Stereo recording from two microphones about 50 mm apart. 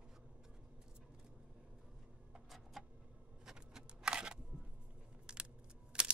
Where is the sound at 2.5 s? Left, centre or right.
Centre.